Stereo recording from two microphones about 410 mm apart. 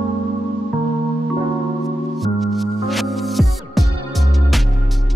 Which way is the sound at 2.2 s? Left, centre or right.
Centre.